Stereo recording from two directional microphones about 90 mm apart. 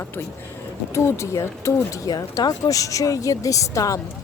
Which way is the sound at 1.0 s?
30° left (ahead or behind).